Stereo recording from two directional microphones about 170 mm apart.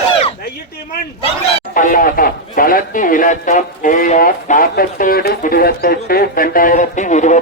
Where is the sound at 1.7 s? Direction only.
55° left (ahead or behind).